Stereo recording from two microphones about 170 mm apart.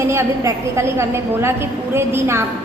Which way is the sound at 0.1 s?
15° right (ahead or behind).